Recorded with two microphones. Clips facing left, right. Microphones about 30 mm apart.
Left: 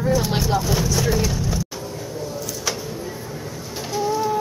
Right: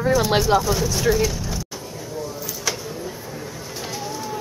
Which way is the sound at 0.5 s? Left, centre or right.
Right.